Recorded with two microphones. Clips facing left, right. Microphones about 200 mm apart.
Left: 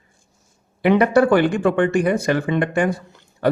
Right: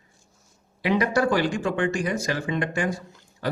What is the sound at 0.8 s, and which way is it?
A man's voice, 55° left (ahead or behind).